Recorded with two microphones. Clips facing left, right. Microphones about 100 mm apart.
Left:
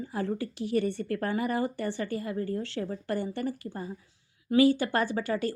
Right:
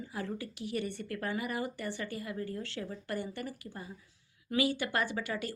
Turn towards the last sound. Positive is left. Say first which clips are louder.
# left 7 dB
turn(degrees=35)  # may be behind; listen again after turning